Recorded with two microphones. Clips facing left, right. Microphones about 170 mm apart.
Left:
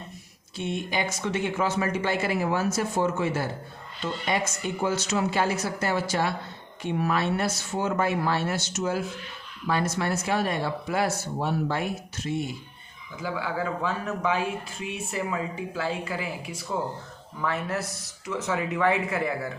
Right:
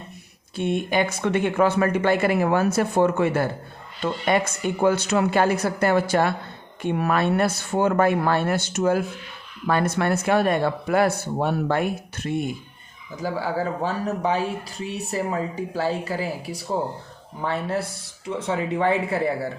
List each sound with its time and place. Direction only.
0.5 s speech: 55° right (ahead or behind)
13.1 s speech: 40° right (ahead or behind)